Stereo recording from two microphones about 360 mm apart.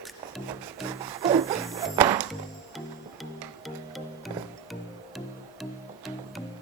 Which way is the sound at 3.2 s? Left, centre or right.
Centre.